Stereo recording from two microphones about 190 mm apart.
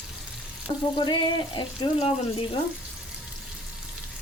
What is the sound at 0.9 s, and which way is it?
Speech, 25° left (ahead or behind).